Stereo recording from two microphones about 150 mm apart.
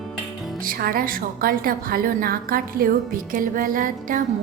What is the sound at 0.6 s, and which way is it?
A woman's voice, 70° right (ahead or behind).